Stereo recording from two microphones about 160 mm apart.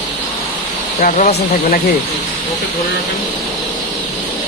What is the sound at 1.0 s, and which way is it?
Speech, 55° left (ahead or behind).